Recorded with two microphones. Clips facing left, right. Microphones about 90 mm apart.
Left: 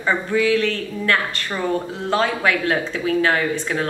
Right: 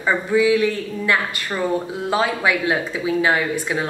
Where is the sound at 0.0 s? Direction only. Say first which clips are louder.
Right 2 dB; 15° right (ahead or behind).